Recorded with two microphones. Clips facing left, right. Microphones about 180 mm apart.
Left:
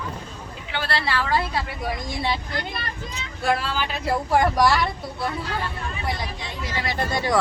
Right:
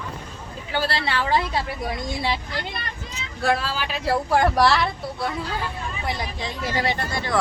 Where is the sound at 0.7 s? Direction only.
40° right (ahead or behind).